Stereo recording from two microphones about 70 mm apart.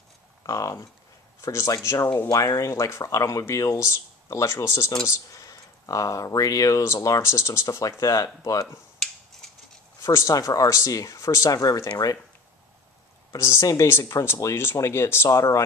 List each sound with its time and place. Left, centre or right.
0.5 s speech: left
9.3 s a sound: centre
10.0 s speech: left
13.4 s speech: left